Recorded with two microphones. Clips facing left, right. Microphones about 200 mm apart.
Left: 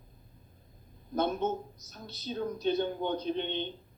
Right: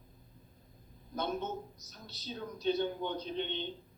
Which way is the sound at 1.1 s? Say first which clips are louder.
Left 6 dB; 55° left (ahead or behind).